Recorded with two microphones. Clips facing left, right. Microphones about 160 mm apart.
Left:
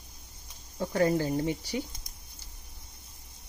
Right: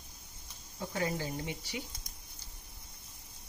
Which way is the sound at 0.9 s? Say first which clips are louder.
Left 10 dB; 50° left (ahead or behind).